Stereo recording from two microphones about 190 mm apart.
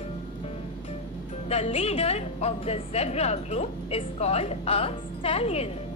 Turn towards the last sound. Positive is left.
turn(degrees=30)  # may be behind; listen again after turning